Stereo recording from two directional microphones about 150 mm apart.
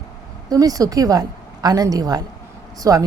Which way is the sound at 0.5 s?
25° right (ahead or behind).